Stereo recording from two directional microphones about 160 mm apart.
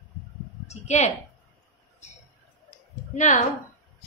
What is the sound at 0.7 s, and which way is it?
Speech, 45° left (ahead or behind).